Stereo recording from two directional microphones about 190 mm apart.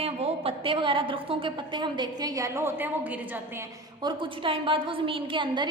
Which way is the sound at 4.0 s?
25° right (ahead or behind).